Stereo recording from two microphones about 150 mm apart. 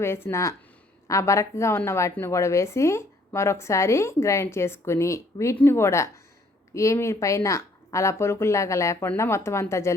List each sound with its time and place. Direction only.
0.0 s a woman's voice: 15° left (ahead or behind)